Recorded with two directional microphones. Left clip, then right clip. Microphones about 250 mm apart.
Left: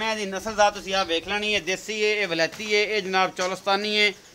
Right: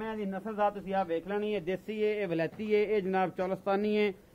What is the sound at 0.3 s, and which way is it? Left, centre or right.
Speech, centre.